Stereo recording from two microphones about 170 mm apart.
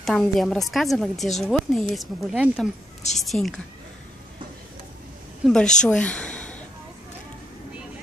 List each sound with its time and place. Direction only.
0.0 s a woman's voice: centre (ahead or behind)
5.4 s a woman's voice: 5° left (ahead or behind)